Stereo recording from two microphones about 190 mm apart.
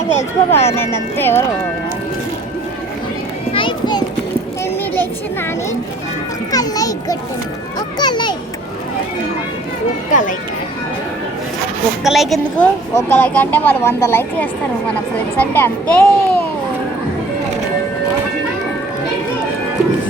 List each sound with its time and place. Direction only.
0.2 s a child's voice: 15° left (ahead or behind)
3.5 s children playing: 25° left (ahead or behind)
6.5 s children playing: 20° left (ahead or behind)
7.9 s a child's voice: 25° left (ahead or behind)
10.1 s speech: 40° left (ahead or behind)
12.0 s a woman's voice: centre (ahead or behind)
12.9 s a child's voice: 10° left (ahead or behind)